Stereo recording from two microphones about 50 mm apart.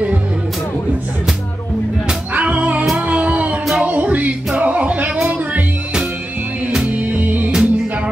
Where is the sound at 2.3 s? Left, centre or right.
Right.